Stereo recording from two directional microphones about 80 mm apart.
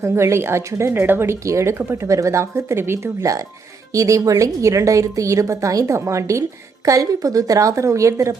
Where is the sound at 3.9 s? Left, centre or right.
Right.